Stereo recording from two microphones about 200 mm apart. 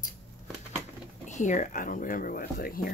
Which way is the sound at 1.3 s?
40° left (ahead or behind).